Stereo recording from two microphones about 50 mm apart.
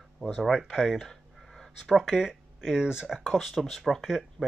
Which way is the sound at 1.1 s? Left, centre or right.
Centre.